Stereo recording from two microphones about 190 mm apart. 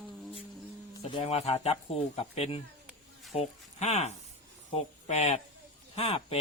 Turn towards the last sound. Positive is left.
turn(degrees=30)  # may be behind; listen again after turning